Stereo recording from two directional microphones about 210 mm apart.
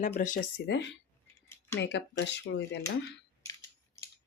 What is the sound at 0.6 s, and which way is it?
A woman's voice, 55° left (ahead or behind).